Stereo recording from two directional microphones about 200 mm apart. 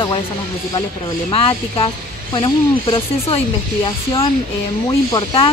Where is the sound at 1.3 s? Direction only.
30° left (ahead or behind).